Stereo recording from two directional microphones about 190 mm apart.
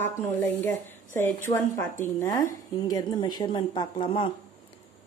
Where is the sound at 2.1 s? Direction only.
15° left (ahead or behind).